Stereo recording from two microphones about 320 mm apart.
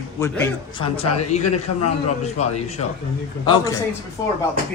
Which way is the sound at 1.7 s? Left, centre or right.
Left.